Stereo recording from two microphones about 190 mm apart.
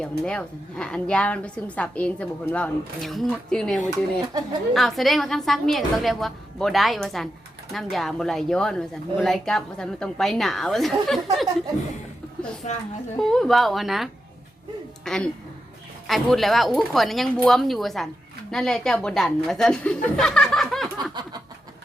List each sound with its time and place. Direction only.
0.0 s a woman's voice: 5° left (ahead or behind)
4.3 s a woman's voice: 20° right (ahead or behind)
4.7 s a woman's voice: centre (ahead or behind)
13.1 s a woman's voice: centre (ahead or behind)
21.1 s a sound: 20° right (ahead or behind)